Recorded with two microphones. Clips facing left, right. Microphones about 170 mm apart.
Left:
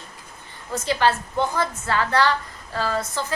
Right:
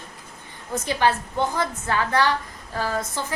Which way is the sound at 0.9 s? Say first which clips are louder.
Left 1 dB; 15° right (ahead or behind).